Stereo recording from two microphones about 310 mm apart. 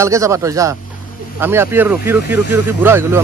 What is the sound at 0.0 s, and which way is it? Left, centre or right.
Speech, centre.